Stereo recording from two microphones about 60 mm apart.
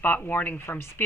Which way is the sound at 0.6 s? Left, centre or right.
Left.